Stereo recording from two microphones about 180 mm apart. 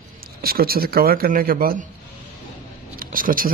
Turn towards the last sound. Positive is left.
turn(degrees=-50)  # may be behind; listen again after turning